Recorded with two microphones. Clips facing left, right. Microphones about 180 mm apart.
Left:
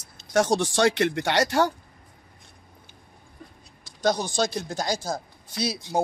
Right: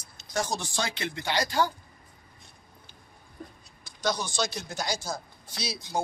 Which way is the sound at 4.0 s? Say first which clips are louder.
Left 5 dB; 55° left (ahead or behind).